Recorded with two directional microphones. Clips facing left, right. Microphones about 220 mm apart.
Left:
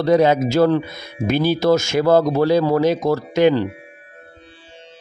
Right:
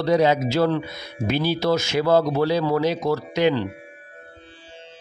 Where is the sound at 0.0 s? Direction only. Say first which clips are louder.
Left 4 dB; 50° left (ahead or behind).